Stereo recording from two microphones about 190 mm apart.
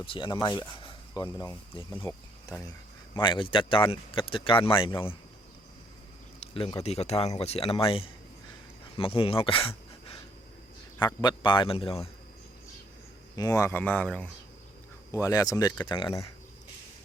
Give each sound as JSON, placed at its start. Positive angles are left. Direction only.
{"t": 0.1, "sound": "speech", "side_deg": 25}
{"t": 3.2, "sound": "speech", "side_deg": 25}
{"t": 6.4, "sound": "speech", "side_deg": 30}
{"t": 13.3, "sound": "speech", "side_deg": 15}
{"t": 15.1, "sound": "speech", "side_deg": 15}